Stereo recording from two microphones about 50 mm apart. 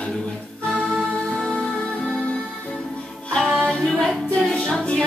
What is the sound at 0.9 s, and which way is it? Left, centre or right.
Music, centre.